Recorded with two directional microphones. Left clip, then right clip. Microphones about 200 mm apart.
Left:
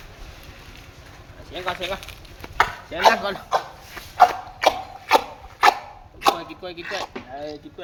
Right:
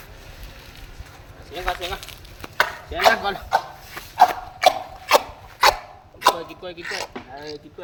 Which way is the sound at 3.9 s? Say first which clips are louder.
Even; 35° right (ahead or behind).